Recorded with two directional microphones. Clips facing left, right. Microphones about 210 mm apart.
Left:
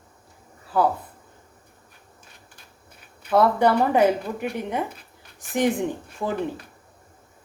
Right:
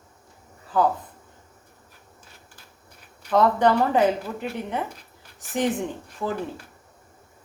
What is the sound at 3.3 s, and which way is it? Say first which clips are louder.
Speech: left 1 dB; 10° left (ahead or behind).